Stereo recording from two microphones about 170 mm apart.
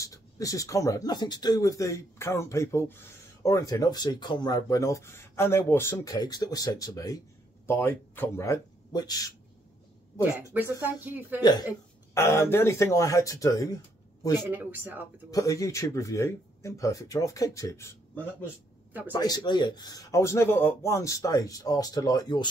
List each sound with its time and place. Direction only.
0.0 s a man's voice: 20° left (ahead or behind)
10.5 s speech: 10° right (ahead or behind)
11.4 s speech: 25° left (ahead or behind)
14.5 s speech: 10° right (ahead or behind)
15.3 s speech: 20° left (ahead or behind)